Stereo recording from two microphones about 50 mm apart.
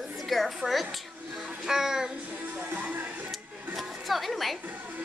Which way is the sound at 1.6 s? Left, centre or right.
Centre.